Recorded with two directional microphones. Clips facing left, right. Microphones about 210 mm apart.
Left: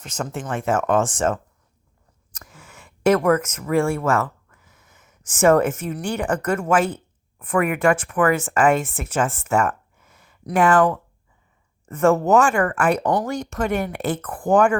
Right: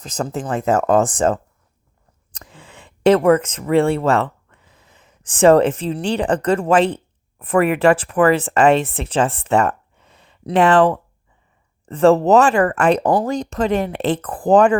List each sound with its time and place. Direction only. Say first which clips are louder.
0.0 s speech: right 4 dB; 35° right (ahead or behind)
9.5 s a sound: right 4 dB; 35° right (ahead or behind)
10.7 s speech: right 3 dB; 30° right (ahead or behind)